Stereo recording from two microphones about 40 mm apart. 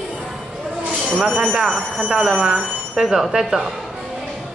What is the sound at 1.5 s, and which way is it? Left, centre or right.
Speech, centre.